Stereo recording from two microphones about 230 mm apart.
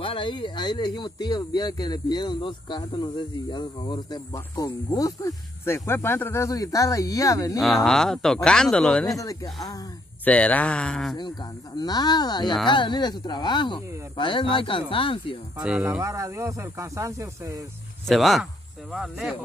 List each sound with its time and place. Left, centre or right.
0.0 s speech: left
7.6 s speech: centre
9.1 s speech: centre
11.1 s speech: centre
15.6 s speech: centre
18.0 s speech: centre